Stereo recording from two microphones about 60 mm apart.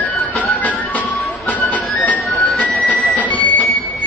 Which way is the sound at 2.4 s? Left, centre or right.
Centre.